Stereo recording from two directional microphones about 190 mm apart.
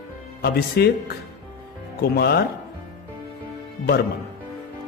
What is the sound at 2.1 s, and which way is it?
Speech, 55° left (ahead or behind).